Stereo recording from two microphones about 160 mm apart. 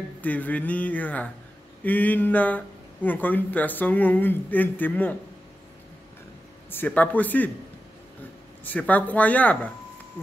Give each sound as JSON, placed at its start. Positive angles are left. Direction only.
{"t": 0.2, "sound": "speech", "side_deg": 10}
{"t": 6.7, "sound": "speech", "side_deg": 10}
{"t": 8.6, "sound": "speech", "side_deg": 10}